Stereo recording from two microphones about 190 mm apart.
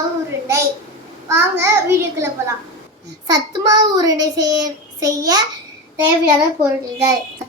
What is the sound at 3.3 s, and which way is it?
Child singing, 20° right (ahead or behind).